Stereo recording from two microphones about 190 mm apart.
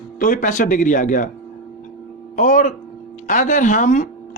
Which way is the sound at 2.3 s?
45° left (ahead or behind).